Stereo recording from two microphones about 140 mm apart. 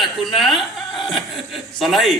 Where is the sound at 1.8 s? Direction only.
Centre (ahead or behind).